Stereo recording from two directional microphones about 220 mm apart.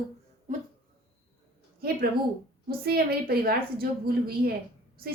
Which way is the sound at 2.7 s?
45° right (ahead or behind).